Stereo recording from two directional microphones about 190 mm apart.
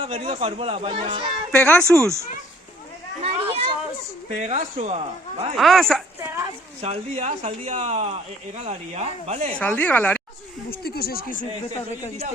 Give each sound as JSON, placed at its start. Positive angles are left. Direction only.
{"t": 0.0, "sound": "speech", "side_deg": -30}
{"t": 1.5, "sound": "speech", "side_deg": 5}
{"t": 2.0, "sound": "speech", "side_deg": -15}
{"t": 3.2, "sound": "speech", "side_deg": -30}
{"t": 5.5, "sound": "speech", "side_deg": 0}
{"t": 6.1, "sound": "a sound", "side_deg": -15}
{"t": 6.8, "sound": "speech", "side_deg": -35}
{"t": 9.6, "sound": "speech", "side_deg": 10}
{"t": 10.7, "sound": "speech", "side_deg": 55}